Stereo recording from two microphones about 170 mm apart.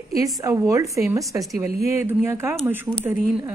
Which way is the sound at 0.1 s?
20° right (ahead or behind).